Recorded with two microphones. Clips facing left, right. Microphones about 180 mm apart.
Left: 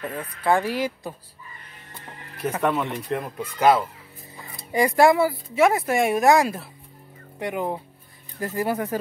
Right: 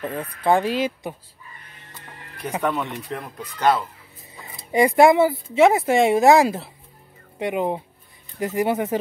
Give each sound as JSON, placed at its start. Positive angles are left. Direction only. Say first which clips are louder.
{"t": 0.1, "sound": "speech", "louder": "right 2 dB", "side_deg": -20}
{"t": 2.6, "sound": "speech", "louder": "left 1 dB", "side_deg": 0}
{"t": 4.6, "sound": "speech", "louder": "right 3 dB", "side_deg": -20}